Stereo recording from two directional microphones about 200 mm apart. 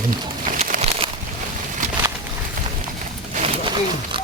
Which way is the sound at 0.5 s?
35° right (ahead or behind).